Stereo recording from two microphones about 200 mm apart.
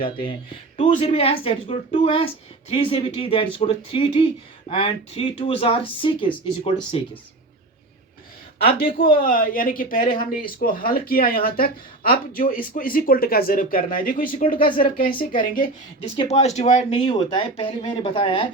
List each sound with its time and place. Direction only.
0.0 s a woman's voice: 25° left (ahead or behind)
8.6 s a woman's voice: 45° left (ahead or behind); by 18.4 s 25° left (ahead or behind)